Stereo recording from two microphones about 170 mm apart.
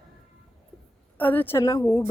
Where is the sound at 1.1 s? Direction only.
10° left (ahead or behind).